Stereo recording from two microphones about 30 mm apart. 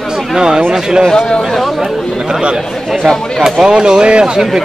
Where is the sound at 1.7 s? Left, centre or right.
Centre.